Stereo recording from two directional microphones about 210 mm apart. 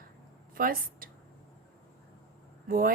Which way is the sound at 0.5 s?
45° right (ahead or behind).